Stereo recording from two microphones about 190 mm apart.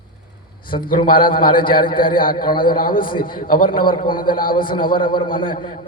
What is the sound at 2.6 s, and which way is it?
Speech, 50° left (ahead or behind).